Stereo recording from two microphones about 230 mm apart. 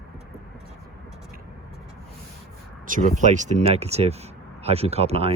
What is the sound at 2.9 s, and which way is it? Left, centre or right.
Speech, right.